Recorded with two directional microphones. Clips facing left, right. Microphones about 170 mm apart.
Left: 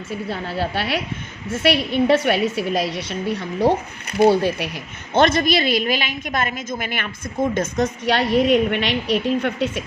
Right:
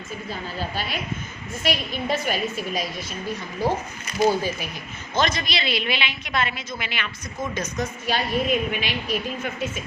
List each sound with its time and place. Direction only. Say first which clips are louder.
0.3 s a woman's voice: left 6 dB; 70° left (ahead or behind)